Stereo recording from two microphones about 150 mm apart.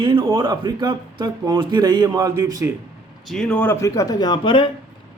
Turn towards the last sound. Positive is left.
turn(degrees=30)  # may be behind; listen again after turning